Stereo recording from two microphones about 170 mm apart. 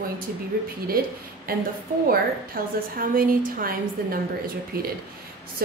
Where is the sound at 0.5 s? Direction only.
60° right (ahead or behind).